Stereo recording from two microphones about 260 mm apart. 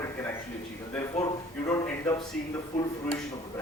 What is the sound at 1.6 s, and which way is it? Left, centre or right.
Speech, centre.